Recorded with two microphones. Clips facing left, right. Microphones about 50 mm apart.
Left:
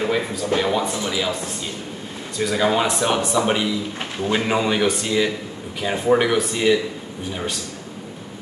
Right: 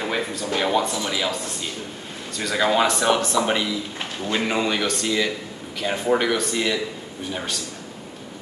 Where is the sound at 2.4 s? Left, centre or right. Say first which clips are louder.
Left 5 dB; centre.